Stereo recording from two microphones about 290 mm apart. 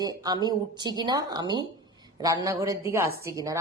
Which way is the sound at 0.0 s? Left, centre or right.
Centre.